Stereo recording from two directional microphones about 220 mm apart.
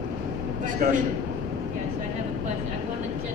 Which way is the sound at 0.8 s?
40° right (ahead or behind).